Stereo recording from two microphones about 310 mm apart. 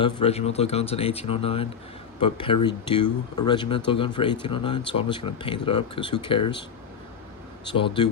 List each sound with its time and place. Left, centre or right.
0.0 s speech: centre
7.7 s speech: centre